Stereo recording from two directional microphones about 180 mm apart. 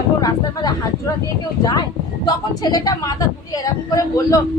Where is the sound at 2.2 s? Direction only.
20° left (ahead or behind).